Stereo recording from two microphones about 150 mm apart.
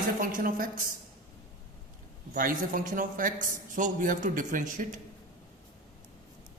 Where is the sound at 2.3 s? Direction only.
65° right (ahead or behind).